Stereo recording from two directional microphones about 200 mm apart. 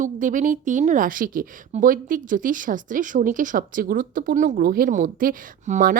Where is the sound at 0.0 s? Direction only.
40° right (ahead or behind).